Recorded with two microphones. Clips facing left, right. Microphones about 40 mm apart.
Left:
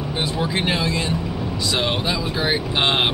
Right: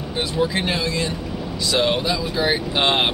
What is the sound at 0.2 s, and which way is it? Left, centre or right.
Speech, centre.